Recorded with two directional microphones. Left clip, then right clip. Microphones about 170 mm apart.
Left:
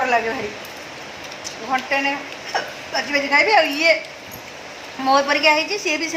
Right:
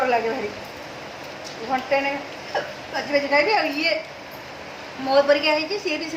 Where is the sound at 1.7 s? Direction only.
10° left (ahead or behind).